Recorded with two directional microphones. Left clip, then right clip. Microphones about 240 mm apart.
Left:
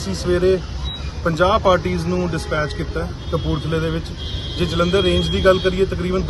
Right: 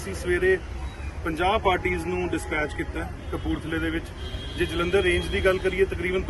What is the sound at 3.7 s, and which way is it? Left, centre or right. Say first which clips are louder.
Speech: left 7 dB; centre.